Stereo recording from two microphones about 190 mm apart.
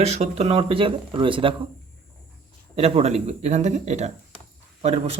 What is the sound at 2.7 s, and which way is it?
A man's voice, 30° right (ahead or behind).